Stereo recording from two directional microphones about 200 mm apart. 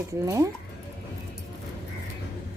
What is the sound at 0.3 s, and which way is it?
Speech, 15° right (ahead or behind).